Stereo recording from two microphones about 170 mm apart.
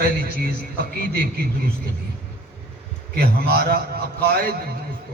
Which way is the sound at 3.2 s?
65° right (ahead or behind).